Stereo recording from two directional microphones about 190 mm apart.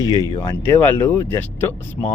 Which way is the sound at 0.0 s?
20° left (ahead or behind).